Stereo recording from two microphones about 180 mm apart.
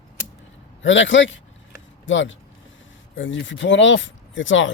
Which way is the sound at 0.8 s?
90° left.